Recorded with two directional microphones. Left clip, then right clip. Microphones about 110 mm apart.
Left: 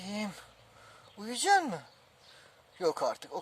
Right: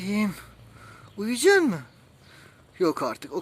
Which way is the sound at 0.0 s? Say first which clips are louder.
Right 9 dB; 30° left (ahead or behind).